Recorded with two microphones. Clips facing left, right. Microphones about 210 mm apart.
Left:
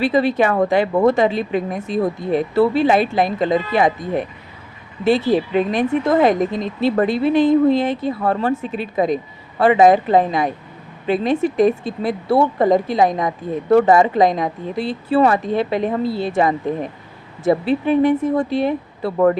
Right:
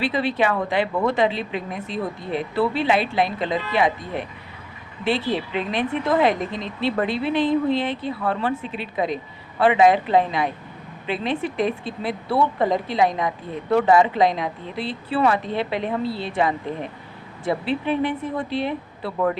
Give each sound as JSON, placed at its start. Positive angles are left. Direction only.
{"t": 0.0, "sound": "speech", "side_deg": 45}